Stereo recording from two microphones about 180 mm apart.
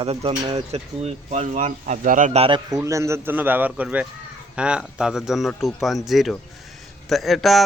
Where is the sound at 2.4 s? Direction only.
25° right (ahead or behind).